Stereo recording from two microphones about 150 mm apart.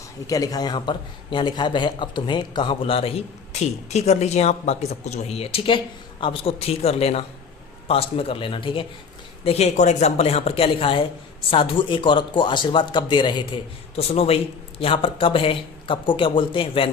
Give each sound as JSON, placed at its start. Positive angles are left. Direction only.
{"t": 0.3, "sound": "speech", "side_deg": 25}